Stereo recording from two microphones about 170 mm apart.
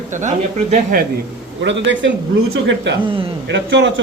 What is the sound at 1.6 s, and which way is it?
Speech, 90° right.